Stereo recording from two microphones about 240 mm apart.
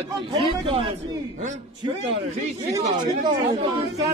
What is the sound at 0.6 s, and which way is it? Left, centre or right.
Speech, right.